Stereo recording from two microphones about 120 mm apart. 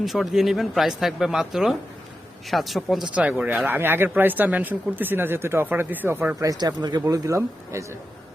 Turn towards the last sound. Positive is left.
turn(degrees=-25)  # may be behind; listen again after turning